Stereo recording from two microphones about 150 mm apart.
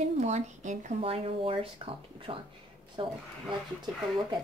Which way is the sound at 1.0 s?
40° right (ahead or behind).